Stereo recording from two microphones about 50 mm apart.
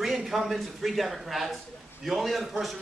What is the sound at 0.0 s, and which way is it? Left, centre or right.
A man's voice, centre.